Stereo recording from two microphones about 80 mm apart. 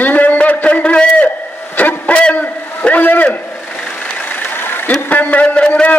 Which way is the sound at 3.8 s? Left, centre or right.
Left.